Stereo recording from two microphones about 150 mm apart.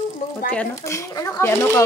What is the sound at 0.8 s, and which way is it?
Speech, 20° left (ahead or behind).